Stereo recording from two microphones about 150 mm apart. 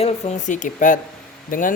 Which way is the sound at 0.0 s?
50° left (ahead or behind).